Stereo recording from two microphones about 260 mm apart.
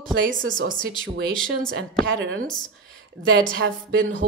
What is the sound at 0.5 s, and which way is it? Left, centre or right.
Speech, right.